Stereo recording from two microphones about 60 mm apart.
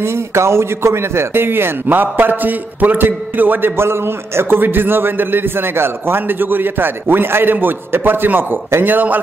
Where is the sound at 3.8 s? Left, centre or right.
Right.